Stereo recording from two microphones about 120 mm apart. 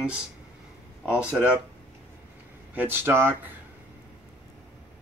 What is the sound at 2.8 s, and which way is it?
Speech, 20° right (ahead or behind).